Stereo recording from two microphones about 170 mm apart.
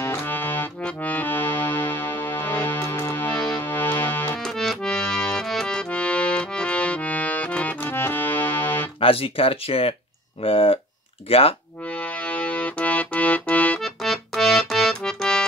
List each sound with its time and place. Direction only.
0.0 s accordion: 15° left (ahead or behind)
9.0 s speech: 35° left (ahead or behind)
11.9 s music: 10° left (ahead or behind)